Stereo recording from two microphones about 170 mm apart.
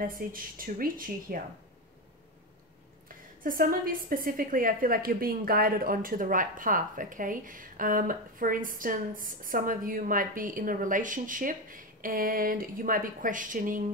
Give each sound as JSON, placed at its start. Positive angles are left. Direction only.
{"t": 0.0, "sound": "a woman's voice", "side_deg": -55}
{"t": 3.4, "sound": "a woman's voice", "side_deg": -55}